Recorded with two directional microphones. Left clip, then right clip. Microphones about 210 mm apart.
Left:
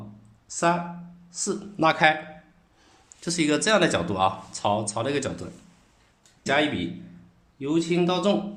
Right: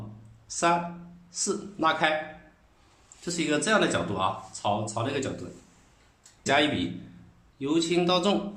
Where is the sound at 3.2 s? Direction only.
55° left (ahead or behind).